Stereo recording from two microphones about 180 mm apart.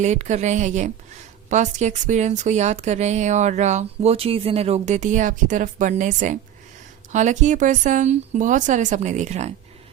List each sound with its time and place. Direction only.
0.0 s speech: 40° right (ahead or behind)